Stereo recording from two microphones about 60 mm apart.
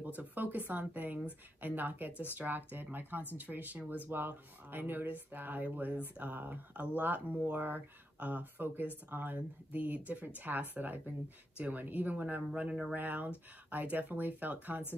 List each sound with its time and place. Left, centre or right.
0.0 s speech: right
12.4 s speech: centre
12.9 s speech: right